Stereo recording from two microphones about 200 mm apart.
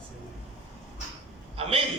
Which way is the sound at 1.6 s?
30° right (ahead or behind).